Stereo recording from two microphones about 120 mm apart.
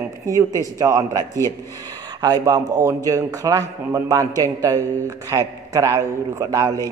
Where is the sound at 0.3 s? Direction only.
30° right (ahead or behind).